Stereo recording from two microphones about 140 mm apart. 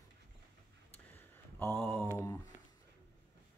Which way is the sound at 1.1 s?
20° left (ahead or behind).